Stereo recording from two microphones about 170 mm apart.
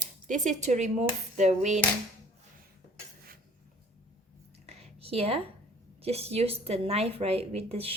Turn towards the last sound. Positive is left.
turn(degrees=-35)  # may be behind; listen again after turning